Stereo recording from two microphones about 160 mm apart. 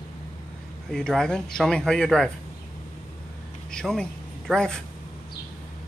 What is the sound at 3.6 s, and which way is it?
A man's voice, 5° left (ahead or behind).